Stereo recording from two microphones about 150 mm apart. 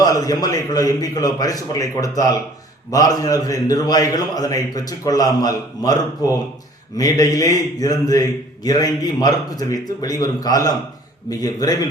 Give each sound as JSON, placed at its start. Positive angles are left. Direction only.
{"t": 0.0, "sound": "a man's voice", "side_deg": 25}